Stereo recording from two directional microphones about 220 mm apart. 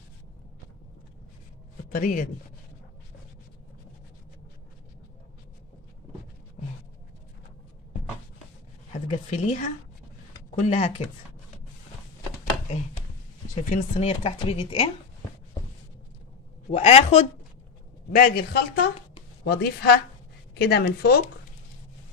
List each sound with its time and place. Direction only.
1.9 s a man's voice: 35° left (ahead or behind)
8.9 s speech: 30° left (ahead or behind)
13.7 s speech: 30° left (ahead or behind)
16.7 s speech: 30° left (ahead or behind)
18.1 s a woman's voice: 40° left (ahead or behind)